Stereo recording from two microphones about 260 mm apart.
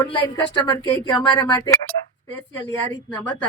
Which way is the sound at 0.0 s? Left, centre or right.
Centre.